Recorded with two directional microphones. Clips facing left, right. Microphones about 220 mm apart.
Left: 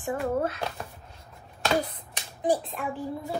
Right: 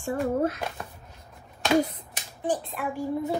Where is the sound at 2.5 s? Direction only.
15° left (ahead or behind).